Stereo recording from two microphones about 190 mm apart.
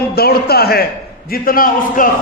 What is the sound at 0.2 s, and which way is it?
A man's voice, 55° left (ahead or behind).